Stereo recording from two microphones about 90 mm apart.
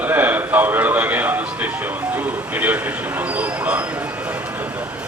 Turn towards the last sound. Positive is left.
turn(degrees=-20)  # may be behind; listen again after turning